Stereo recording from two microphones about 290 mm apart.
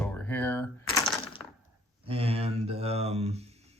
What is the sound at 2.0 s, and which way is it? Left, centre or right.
Speech, centre.